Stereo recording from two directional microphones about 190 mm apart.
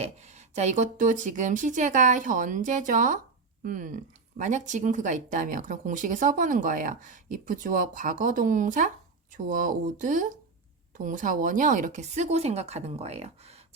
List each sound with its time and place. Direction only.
0.0 s speech: 35° right (ahead or behind)